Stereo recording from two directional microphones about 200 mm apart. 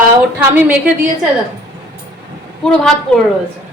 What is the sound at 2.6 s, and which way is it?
Speech, centre (ahead or behind).